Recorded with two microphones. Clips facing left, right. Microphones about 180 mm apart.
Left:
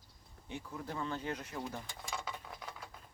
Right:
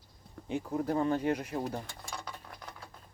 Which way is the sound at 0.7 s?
40° right (ahead or behind).